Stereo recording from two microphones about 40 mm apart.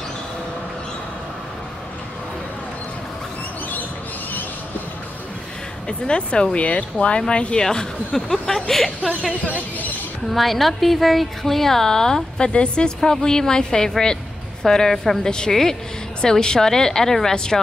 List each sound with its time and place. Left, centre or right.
5.9 s speech: left
6.6 s speech: left
7.6 s speech: centre
10.3 s a woman's voice: centre